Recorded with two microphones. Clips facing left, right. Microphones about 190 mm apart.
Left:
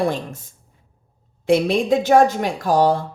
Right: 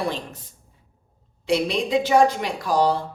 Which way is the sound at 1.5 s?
50° left (ahead or behind).